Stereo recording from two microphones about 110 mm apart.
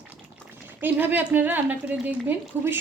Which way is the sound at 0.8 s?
15° right (ahead or behind).